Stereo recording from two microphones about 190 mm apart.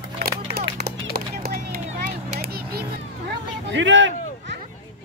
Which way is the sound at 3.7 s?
75° right (ahead or behind).